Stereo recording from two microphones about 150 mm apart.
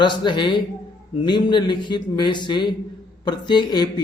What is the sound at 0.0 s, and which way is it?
A man's voice, 30° left (ahead or behind).